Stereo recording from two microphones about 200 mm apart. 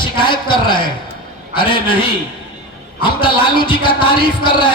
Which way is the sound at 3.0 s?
25° left (ahead or behind).